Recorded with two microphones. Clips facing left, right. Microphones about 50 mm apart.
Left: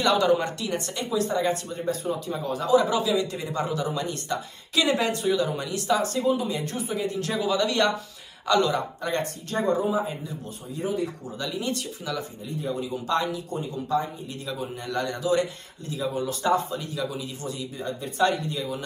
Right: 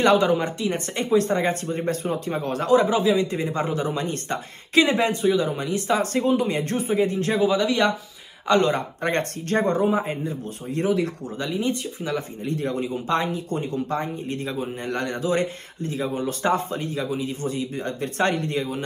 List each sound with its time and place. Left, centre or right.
0.0 s speech: right
2.8 s speech: right
7.6 s speech: centre
8.5 s speech: right
10.8 s speech: right
11.3 s speech: right
12.4 s speech: right
12.8 s speech: right
13.5 s speech: right
14.5 s speech: right
17.7 s speech: right